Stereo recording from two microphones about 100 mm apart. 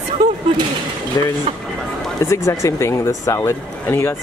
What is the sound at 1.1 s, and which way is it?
Speech, 35° left (ahead or behind).